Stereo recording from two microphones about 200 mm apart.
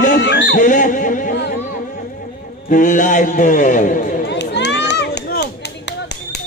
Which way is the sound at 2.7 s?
40° left (ahead or behind).